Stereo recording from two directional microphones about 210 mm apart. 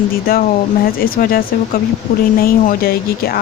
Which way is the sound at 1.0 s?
45° left (ahead or behind).